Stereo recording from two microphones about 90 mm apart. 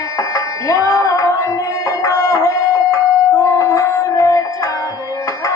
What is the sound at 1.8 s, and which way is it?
Music, 35° left (ahead or behind).